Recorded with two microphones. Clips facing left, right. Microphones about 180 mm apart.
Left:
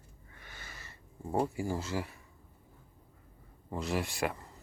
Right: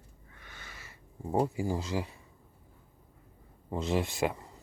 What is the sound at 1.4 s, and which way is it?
Speech, 20° right (ahead or behind).